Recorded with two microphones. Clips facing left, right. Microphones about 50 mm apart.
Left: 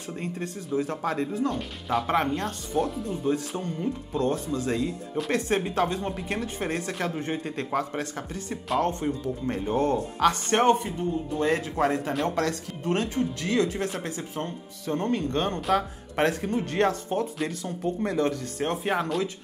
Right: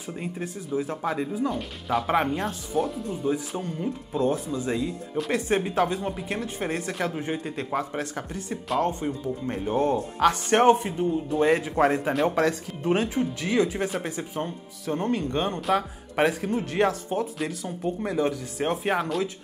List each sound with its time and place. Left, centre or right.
0.2 s speech: centre
4.6 s speech: centre
4.8 s speech: centre
8.0 s speech: centre
9.0 s speech: centre
9.7 s speech: centre
9.9 s speech: centre